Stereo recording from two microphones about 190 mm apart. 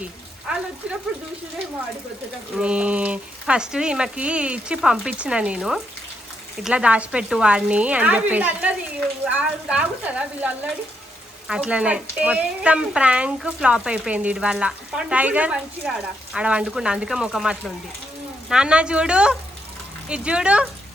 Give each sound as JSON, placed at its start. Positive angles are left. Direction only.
{"t": 0.0, "sound": "frying", "side_deg": -5}
{"t": 2.6, "sound": "speech", "side_deg": -5}